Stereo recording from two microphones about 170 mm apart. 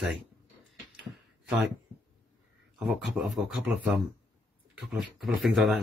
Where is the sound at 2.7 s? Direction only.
5° right (ahead or behind).